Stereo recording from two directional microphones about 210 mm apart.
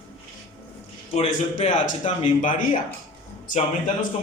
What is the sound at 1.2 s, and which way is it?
A man's voice, 30° left (ahead or behind).